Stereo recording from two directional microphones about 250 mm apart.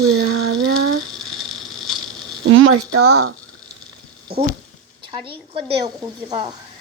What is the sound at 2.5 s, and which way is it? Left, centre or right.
Speech, right.